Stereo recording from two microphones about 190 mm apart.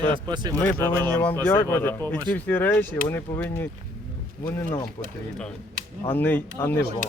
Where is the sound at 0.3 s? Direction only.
20° right (ahead or behind).